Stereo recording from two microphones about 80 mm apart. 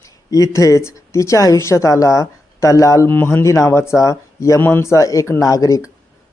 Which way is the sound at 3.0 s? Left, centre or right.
Left.